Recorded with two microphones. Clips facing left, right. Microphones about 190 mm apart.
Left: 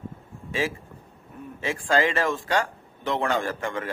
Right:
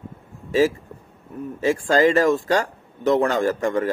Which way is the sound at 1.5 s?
40° right (ahead or behind).